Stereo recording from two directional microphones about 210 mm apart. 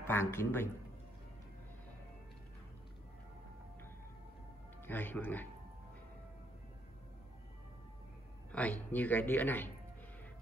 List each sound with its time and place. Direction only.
0.0 s speech: 10° left (ahead or behind)
4.8 s speech: 10° left (ahead or behind)
8.5 s speech: 5° left (ahead or behind)